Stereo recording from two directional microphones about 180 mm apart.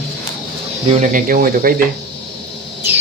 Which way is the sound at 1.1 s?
50° right (ahead or behind).